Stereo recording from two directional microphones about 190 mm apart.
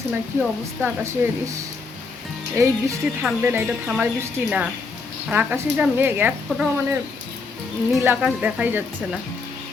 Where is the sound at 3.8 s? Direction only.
5° right (ahead or behind).